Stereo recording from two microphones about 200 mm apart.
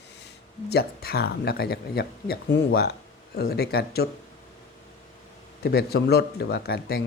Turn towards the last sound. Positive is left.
turn(degrees=50)  # may be behind; listen again after turning